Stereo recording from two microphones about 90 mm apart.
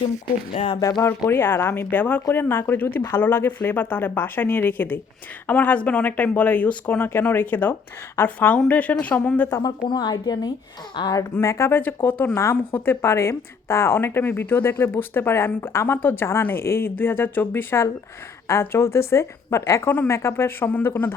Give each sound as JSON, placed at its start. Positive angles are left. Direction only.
{"t": 0.8, "sound": "speech", "side_deg": 35}
{"t": 1.3, "sound": "a woman's voice", "side_deg": 25}
{"t": 9.6, "sound": "a woman's voice", "side_deg": 55}
{"t": 11.1, "sound": "speech", "side_deg": 35}
{"t": 12.0, "sound": "a woman's voice", "side_deg": 20}
{"t": 12.3, "sound": "a woman's voice", "side_deg": 30}